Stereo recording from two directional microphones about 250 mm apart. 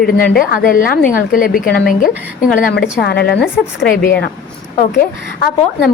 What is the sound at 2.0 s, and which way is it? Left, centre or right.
Speech, centre.